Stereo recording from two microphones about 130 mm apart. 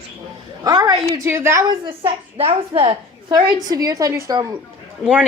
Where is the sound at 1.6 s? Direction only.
45° right (ahead or behind).